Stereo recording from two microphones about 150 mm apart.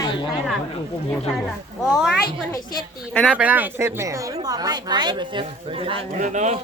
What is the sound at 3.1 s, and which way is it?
Speech, 10° left (ahead or behind).